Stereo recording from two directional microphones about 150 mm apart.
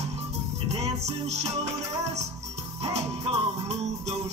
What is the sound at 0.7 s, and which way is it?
Music, 45° right (ahead or behind).